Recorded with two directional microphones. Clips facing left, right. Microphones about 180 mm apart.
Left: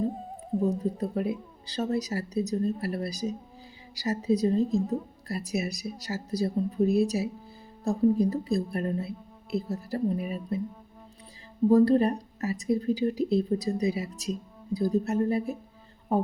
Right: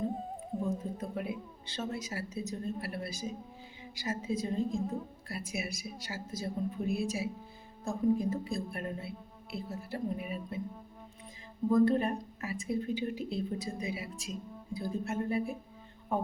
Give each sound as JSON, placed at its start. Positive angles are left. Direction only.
{"t": 0.6, "sound": "a woman's voice", "side_deg": 35}
{"t": 11.7, "sound": "a woman's voice", "side_deg": 35}